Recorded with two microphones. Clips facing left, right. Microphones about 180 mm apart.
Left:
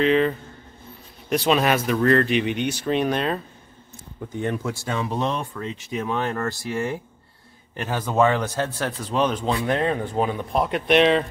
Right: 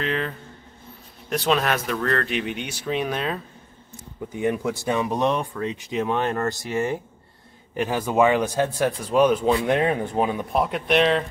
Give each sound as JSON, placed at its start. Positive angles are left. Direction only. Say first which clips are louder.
{"t": 0.0, "sound": "speech", "louder": "left 8 dB", "side_deg": 0}
{"t": 1.3, "sound": "speech", "louder": "left 2 dB", "side_deg": 5}
{"t": 10.5, "sound": "speech", "louder": "left 4 dB", "side_deg": 0}